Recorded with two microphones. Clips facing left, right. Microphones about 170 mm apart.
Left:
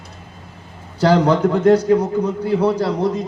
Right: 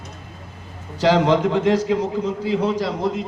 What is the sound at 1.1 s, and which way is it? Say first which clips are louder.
A man's voice: left 1 dB; 90° right.